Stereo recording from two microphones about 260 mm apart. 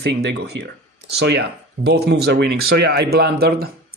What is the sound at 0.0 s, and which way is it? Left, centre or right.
Speech, right.